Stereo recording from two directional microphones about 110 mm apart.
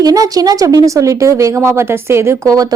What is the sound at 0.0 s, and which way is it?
A woman's voice, 35° right (ahead or behind).